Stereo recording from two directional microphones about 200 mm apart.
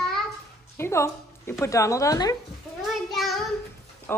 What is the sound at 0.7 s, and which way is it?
Speech, 15° left (ahead or behind).